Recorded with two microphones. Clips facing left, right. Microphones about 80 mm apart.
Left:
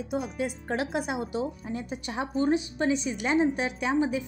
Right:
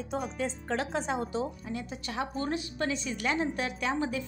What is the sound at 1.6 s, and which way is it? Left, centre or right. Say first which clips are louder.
A woman's voice: left 3 dB; left.